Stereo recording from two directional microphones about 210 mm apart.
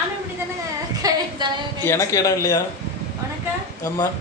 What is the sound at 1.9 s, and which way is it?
Speech, 15° left (ahead or behind).